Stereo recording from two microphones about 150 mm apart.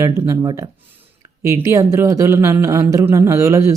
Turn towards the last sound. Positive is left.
turn(degrees=-20)  # may be behind; listen again after turning